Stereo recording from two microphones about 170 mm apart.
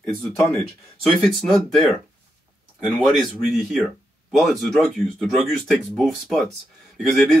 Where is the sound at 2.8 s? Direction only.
Centre (ahead or behind).